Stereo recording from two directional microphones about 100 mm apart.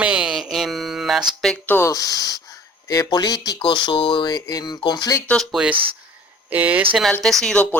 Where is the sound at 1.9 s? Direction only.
35° left (ahead or behind).